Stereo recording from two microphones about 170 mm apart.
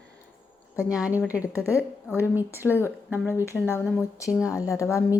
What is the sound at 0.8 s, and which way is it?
Speech, 5° right (ahead or behind).